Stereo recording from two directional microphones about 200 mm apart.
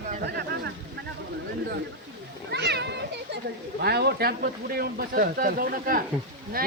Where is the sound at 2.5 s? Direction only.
60° right (ahead or behind).